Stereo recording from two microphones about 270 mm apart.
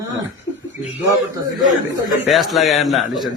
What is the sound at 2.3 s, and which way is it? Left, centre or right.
A man's voice, centre.